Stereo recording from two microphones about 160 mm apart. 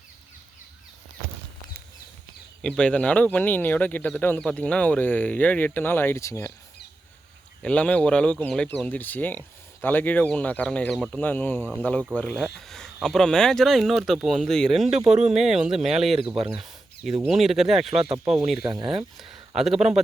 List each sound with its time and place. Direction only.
2.6 s speech: 5° left (ahead or behind)
7.6 s speech: 5° left (ahead or behind)
14.8 s speech: 45° right (ahead or behind)
15.4 s speech: 5° right (ahead or behind)
16.5 s a sound: centre (ahead or behind)
17.2 s speech: centre (ahead or behind)
18.6 s speech: 30° right (ahead or behind)
19.1 s speech: centre (ahead or behind)